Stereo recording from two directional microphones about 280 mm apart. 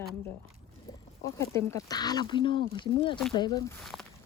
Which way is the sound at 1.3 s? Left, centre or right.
Centre.